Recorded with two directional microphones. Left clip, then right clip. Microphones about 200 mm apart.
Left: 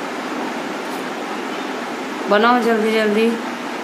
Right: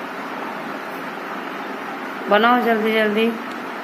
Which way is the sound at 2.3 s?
5° left (ahead or behind).